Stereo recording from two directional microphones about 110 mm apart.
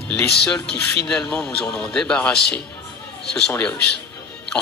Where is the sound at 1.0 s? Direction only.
10° left (ahead or behind).